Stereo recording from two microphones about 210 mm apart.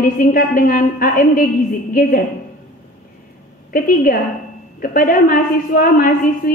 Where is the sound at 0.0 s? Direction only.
40° left (ahead or behind).